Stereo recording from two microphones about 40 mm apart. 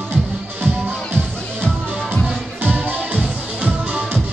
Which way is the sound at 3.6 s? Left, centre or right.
Right.